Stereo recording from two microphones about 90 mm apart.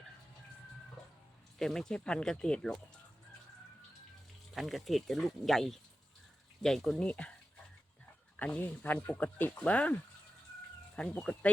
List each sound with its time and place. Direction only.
1.5 s speech: 5° left (ahead or behind)
4.5 s speech: centre (ahead or behind)
8.4 s speech: 15° left (ahead or behind)
11.2 s speech: 15° left (ahead or behind)